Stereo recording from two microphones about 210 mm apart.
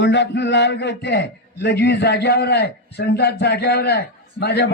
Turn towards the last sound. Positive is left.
turn(degrees=50)  # may be behind; listen again after turning